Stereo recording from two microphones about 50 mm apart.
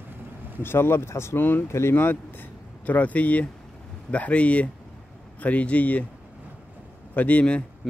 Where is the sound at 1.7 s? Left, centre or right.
Left.